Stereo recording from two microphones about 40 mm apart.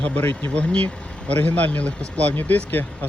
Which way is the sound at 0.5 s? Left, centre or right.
Left.